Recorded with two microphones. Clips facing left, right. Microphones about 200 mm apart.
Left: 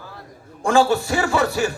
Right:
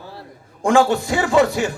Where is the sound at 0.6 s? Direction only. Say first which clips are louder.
Right 1 dB; 15° right (ahead or behind).